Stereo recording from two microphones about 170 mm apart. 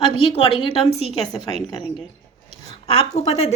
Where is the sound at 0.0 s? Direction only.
30° left (ahead or behind).